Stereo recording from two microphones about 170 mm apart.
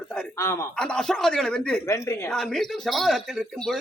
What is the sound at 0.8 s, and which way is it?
Speech, 5° left (ahead or behind).